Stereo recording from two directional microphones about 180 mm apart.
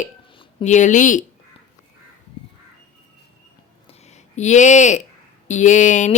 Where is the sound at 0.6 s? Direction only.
40° left (ahead or behind).